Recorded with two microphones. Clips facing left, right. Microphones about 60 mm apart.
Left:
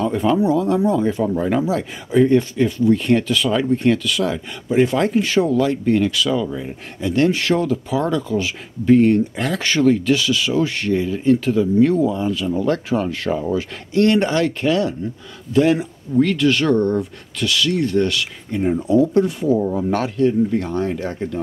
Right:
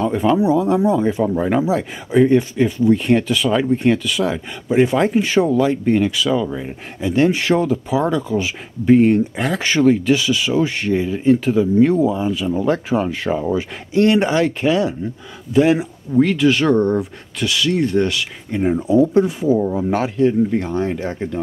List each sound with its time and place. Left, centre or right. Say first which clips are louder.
0.0 s speech: right 1 dB; centre